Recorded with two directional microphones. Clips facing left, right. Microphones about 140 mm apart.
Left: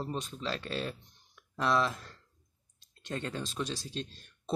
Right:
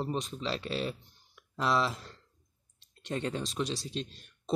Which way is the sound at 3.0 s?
20° right (ahead or behind).